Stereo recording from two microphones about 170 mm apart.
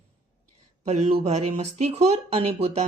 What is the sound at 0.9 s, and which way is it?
Speech, 40° right (ahead or behind).